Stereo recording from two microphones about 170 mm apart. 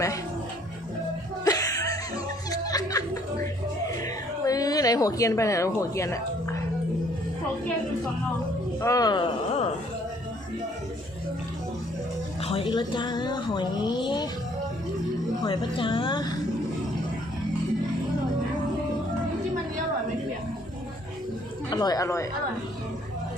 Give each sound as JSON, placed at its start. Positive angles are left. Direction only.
{"t": 1.5, "sound": "chuckle", "side_deg": 20}
{"t": 2.5, "sound": "music", "side_deg": 20}
{"t": 3.8, "sound": "a sound", "side_deg": 20}
{"t": 8.8, "sound": "speech", "side_deg": 20}
{"t": 12.4, "sound": "speech", "side_deg": 35}
{"t": 15.4, "sound": "speech", "side_deg": 30}
{"t": 21.7, "sound": "speech", "side_deg": 25}